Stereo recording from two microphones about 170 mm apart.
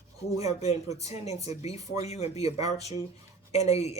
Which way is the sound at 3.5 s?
40° left (ahead or behind).